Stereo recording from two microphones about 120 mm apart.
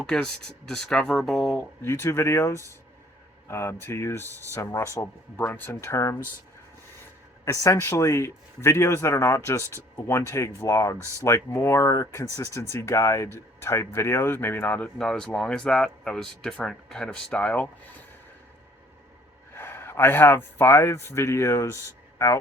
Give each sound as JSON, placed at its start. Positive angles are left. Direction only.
{"t": 0.0, "sound": "speech", "side_deg": 5}
{"t": 1.8, "sound": "speech", "side_deg": 20}
{"t": 7.4, "sound": "speech", "side_deg": 25}
{"t": 19.5, "sound": "a man's voice", "side_deg": 20}